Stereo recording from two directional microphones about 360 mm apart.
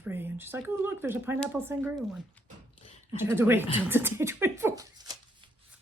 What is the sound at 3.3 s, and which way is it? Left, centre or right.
Speech, centre.